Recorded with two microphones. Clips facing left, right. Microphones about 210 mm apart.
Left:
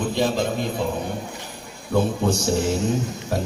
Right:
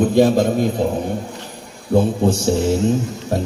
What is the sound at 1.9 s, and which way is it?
Speech, 25° right (ahead or behind).